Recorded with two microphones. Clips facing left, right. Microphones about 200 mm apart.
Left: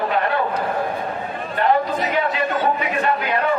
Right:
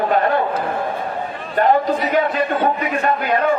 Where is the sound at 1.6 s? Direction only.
45° right (ahead or behind).